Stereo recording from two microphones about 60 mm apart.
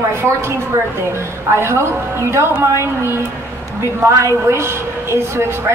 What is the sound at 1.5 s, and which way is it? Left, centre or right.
A woman's voice, right.